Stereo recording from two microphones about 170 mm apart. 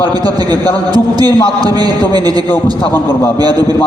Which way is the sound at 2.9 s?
15° left (ahead or behind).